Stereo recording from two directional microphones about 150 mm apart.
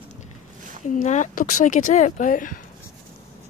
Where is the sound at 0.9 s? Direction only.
55° left (ahead or behind).